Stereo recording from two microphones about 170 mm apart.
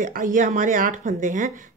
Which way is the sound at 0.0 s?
50° right (ahead or behind).